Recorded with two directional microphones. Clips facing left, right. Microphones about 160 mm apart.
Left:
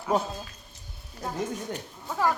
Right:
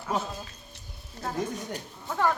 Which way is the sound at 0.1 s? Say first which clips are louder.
Left 5 dB; 45° left (ahead or behind).